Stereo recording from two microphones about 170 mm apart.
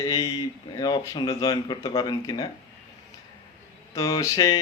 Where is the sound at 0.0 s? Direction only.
20° left (ahead or behind).